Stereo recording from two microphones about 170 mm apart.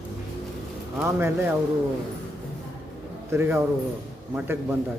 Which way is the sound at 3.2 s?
15° right (ahead or behind).